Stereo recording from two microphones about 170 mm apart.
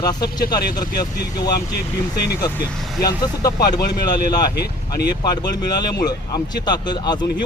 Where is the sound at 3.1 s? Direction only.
20° left (ahead or behind).